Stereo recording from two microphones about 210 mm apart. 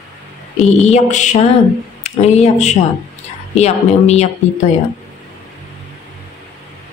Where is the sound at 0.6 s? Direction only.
30° left (ahead or behind).